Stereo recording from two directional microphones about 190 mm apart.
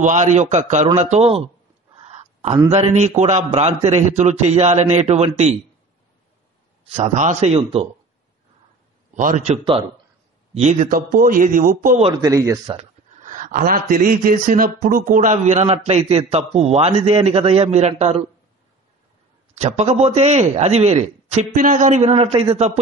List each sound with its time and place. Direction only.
0.0 s a man's voice: 40° right (ahead or behind)
2.0 s a sound: 35° right (ahead or behind)
2.7 s a man's voice: 35° right (ahead or behind)
7.2 s a man's voice: 35° right (ahead or behind)
9.1 s a man's voice: 40° right (ahead or behind)
12.0 s speech: 20° right (ahead or behind)
12.7 s a man's voice: 40° right (ahead or behind)
19.6 s a man's voice: 35° right (ahead or behind)